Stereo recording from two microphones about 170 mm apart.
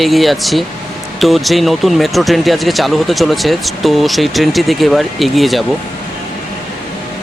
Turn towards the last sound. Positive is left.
turn(degrees=0)  # may be behind; listen again after turning